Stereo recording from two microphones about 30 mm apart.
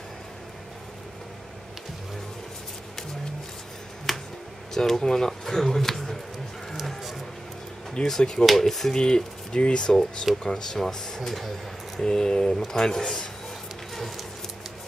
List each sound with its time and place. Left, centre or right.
4.1 s finger snapping: centre
4.7 s speech: centre
8.2 s speech: left
8.5 s speech: centre
8.9 s speech: left
9.6 s speech: left
9.8 s speech: left
13.9 s a sound: centre